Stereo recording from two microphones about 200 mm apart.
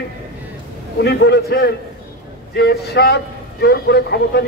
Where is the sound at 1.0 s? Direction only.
55° left (ahead or behind).